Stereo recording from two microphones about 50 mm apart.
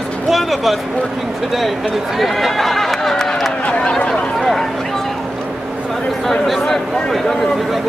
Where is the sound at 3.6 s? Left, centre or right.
Left.